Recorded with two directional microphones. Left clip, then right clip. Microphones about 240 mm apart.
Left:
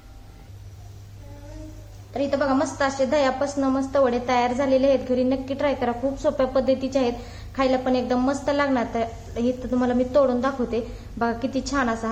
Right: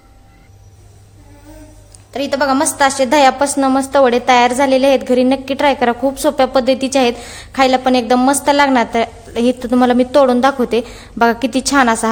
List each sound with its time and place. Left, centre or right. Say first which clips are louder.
2.1 s a woman's voice: right 7 dB; right